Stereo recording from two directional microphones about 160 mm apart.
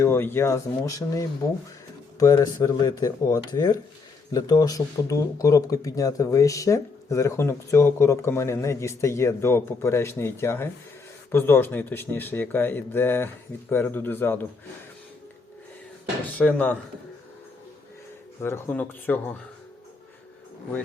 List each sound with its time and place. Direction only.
0.0 s speech: 15° left (ahead or behind)
16.2 s speech: 10° left (ahead or behind)
18.4 s speech: 15° left (ahead or behind)